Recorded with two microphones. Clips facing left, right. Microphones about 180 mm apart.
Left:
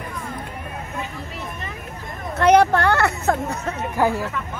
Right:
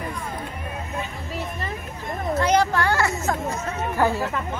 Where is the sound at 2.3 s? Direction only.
60° left (ahead or behind).